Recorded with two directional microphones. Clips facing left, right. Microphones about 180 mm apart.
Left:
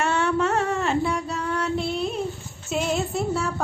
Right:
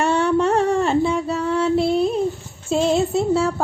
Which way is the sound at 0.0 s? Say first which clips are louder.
Right 5 dB; 30° right (ahead or behind).